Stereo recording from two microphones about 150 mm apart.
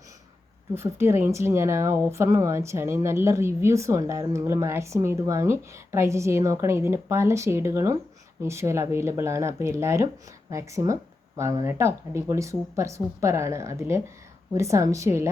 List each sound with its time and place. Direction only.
0.7 s speech: 15° right (ahead or behind)